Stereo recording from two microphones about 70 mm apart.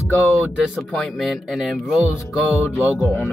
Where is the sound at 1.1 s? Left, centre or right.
Centre.